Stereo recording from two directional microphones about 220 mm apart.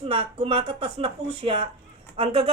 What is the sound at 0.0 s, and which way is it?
Speech, 25° right (ahead or behind).